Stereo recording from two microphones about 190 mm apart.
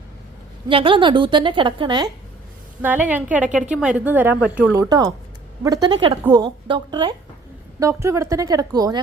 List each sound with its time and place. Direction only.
0.7 s a woman's voice: 25° right (ahead or behind)
2.8 s a woman's voice: 10° right (ahead or behind)